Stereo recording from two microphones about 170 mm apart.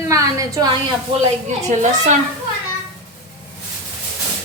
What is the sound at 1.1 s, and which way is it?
Speech, 30° right (ahead or behind).